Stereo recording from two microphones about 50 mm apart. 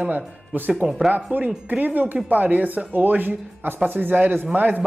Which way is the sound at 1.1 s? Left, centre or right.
Right.